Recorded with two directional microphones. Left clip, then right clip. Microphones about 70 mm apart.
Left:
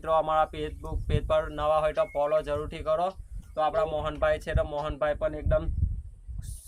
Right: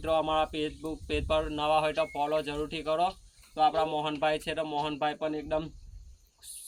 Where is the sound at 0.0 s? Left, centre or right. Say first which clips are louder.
Left 3 dB; left.